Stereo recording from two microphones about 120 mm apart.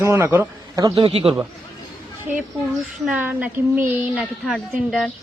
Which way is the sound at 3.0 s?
15° right (ahead or behind).